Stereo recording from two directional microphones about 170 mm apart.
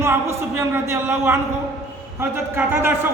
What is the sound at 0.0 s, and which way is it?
Speech, 15° right (ahead or behind).